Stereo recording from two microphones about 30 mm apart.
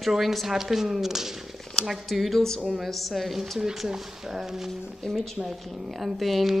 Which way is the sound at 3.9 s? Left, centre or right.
Centre.